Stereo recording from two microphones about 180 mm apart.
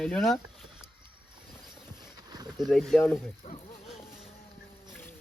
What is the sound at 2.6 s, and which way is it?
Speech, centre (ahead or behind).